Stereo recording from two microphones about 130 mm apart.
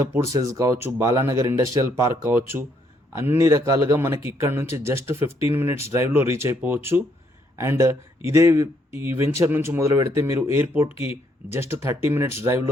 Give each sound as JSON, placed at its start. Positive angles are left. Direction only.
{"t": 0.0, "sound": "speech", "side_deg": -25}
{"t": 10.9, "sound": "speech", "side_deg": 45}
{"t": 11.5, "sound": "speech", "side_deg": -20}